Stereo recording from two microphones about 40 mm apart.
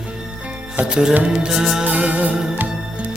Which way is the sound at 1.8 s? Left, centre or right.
Right.